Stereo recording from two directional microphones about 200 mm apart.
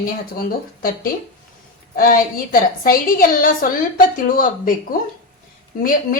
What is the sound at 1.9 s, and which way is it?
Speech, 45° left (ahead or behind).